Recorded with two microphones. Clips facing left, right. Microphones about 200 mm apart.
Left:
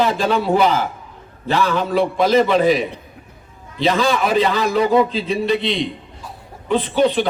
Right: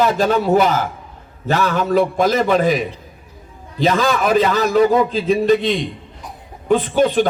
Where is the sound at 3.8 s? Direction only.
45° right (ahead or behind).